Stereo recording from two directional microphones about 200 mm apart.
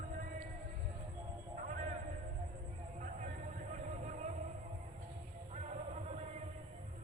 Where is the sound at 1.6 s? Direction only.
40° right (ahead or behind).